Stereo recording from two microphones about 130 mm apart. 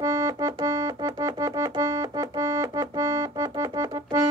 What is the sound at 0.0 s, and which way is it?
Keyboard, 25° right (ahead or behind).